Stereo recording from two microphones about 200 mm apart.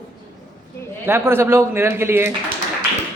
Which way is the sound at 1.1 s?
10° right (ahead or behind).